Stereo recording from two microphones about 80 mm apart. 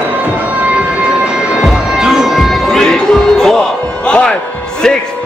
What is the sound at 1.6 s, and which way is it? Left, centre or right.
Music, centre.